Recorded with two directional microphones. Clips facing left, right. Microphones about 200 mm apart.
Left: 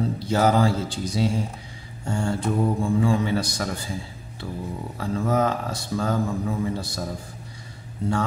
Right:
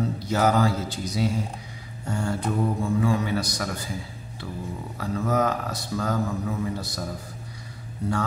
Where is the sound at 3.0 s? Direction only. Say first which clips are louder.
Left 2 dB; 30° left (ahead or behind).